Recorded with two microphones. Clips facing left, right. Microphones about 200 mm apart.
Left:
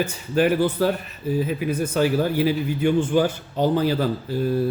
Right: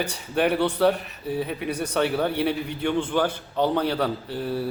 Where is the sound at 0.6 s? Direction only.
70° right (ahead or behind).